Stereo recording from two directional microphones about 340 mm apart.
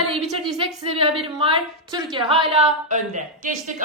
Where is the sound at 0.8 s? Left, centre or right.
Centre.